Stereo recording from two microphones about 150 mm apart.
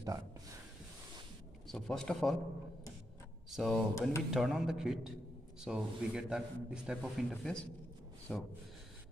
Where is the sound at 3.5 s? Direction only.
Centre (ahead or behind).